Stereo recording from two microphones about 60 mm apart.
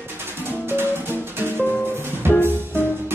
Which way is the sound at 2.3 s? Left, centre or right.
Left.